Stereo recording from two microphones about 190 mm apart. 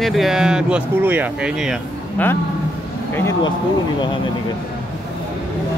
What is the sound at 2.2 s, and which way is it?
Speech, 10° left (ahead or behind).